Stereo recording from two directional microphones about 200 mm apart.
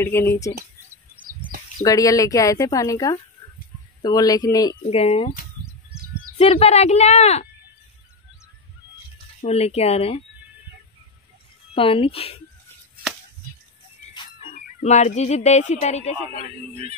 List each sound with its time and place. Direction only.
0.0 s speech: 15° left (ahead or behind)
1.8 s speech: 15° left (ahead or behind)
4.8 s speech: 30° left (ahead or behind)
6.3 s speech: 30° left (ahead or behind)
9.4 s speech: 30° left (ahead or behind)
11.7 s speech: 25° left (ahead or behind)
14.1 s speech: 30° left (ahead or behind)
16.3 s speech: 30° right (ahead or behind)